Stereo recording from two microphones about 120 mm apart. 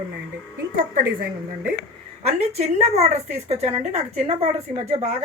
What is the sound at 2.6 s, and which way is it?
Speech, 65° right (ahead or behind).